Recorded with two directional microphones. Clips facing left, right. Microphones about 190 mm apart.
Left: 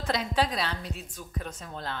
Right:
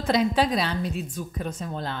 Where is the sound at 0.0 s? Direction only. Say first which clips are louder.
Right 6 dB; 15° right (ahead or behind).